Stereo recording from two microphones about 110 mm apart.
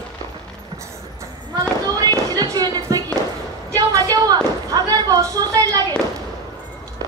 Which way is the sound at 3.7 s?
35° right (ahead or behind).